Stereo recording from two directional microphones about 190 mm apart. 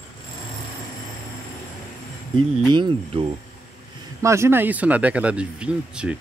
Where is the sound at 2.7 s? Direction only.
25° right (ahead or behind); by 6.2 s 5° right (ahead or behind).